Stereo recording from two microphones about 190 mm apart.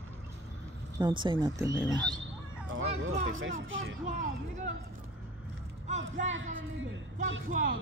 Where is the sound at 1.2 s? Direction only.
20° right (ahead or behind).